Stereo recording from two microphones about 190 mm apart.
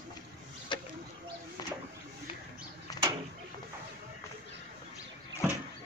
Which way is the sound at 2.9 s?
20° left (ahead or behind).